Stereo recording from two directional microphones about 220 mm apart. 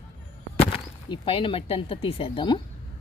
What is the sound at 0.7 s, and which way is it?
Speech, 25° left (ahead or behind).